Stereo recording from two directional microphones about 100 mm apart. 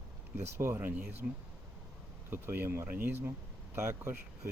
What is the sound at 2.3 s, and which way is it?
Speech, 25° right (ahead or behind).